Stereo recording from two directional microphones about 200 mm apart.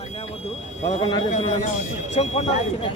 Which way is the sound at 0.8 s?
35° left (ahead or behind).